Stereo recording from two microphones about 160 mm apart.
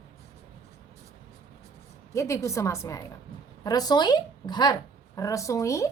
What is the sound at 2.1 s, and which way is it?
A woman's voice, 20° left (ahead or behind).